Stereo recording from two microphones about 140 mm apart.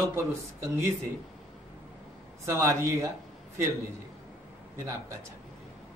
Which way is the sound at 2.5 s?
20° right (ahead or behind).